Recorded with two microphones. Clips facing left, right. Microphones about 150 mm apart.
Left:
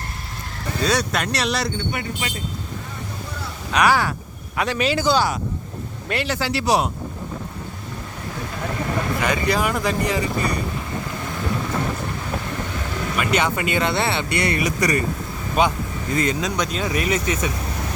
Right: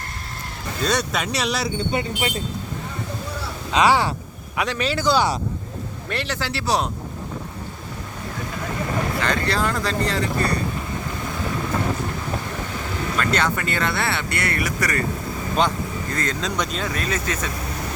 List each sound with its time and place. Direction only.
0.9 s speech: centre (ahead or behind)
1.9 s speech: 25° right (ahead or behind)
3.7 s speech: 20° right (ahead or behind)
4.6 s speech: 10° left (ahead or behind)
6.1 s speech: 10° left (ahead or behind)
9.2 s speech: 10° left (ahead or behind)
13.1 s speech: 10° left (ahead or behind)
15.6 s speech: 10° left (ahead or behind)
16.6 s speech: 5° left (ahead or behind)